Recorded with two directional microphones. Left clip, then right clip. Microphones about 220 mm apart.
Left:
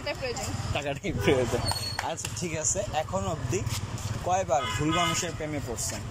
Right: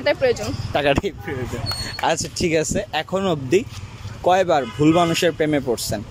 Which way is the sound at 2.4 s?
40° right (ahead or behind).